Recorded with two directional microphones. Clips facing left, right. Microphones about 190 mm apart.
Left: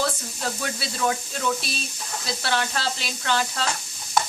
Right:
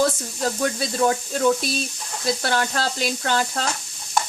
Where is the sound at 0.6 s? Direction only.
40° right (ahead or behind).